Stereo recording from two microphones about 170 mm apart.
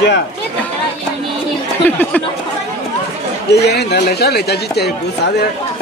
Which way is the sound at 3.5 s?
75° left (ahead or behind).